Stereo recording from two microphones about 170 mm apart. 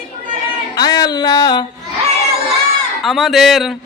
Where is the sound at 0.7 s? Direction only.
25° left (ahead or behind).